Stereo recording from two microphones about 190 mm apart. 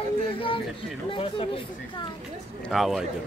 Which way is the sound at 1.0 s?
30° left (ahead or behind).